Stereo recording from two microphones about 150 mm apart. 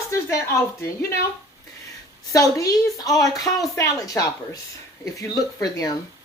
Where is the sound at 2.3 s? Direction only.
20° left (ahead or behind).